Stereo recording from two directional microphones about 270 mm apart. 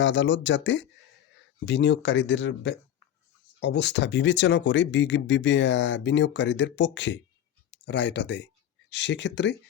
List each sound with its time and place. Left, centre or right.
0.0 s speech: left